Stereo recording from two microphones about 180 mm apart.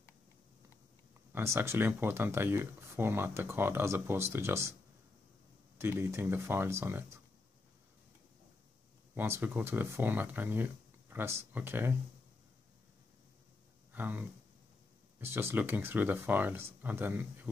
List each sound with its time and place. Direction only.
1.3 s speech: 15° right (ahead or behind)
5.8 s speech: 15° right (ahead or behind)
9.1 s speech: 10° right (ahead or behind)
13.9 s speech: 10° right (ahead or behind)